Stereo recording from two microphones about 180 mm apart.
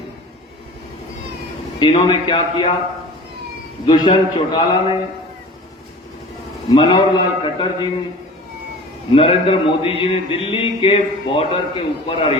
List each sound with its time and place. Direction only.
1.8 s a man's voice: 25° left (ahead or behind)
3.8 s a man's voice: 25° left (ahead or behind)
6.7 s a man's voice: 25° left (ahead or behind)
9.1 s a man's voice: 30° left (ahead or behind)